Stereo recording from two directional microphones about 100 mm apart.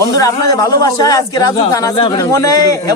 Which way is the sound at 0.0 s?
35° left (ahead or behind).